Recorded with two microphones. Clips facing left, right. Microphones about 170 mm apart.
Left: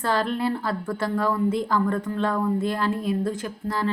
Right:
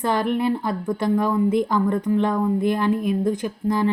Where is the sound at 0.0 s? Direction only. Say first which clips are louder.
Right 3 dB; 20° right (ahead or behind).